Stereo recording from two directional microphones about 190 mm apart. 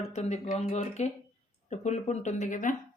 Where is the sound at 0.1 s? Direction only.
35° left (ahead or behind).